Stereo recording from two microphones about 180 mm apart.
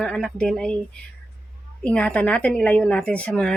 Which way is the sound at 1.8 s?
10° left (ahead or behind).